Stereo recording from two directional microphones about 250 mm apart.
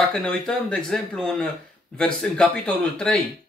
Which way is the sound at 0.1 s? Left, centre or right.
Centre.